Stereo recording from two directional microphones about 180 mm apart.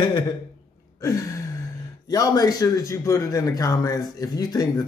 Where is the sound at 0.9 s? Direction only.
20° left (ahead or behind).